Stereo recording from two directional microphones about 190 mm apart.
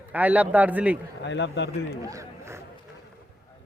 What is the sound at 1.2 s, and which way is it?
Speech, 65° left (ahead or behind).